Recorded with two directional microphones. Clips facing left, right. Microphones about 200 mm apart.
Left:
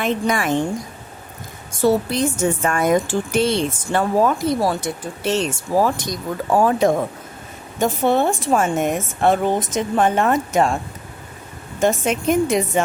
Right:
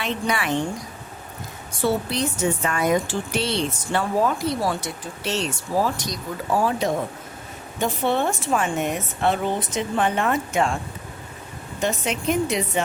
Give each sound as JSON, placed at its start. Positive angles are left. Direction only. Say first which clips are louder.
{"t": 0.0, "sound": "speech", "louder": "left 5 dB", "side_deg": 45}
{"t": 1.8, "sound": "speech", "louder": "left 5 dB", "side_deg": 45}
{"t": 11.8, "sound": "speech", "louder": "left 6 dB", "side_deg": 50}